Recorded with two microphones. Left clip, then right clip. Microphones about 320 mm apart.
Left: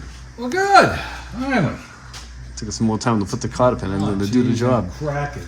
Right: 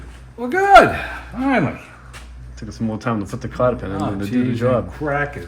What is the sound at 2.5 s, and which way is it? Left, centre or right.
Speech, centre.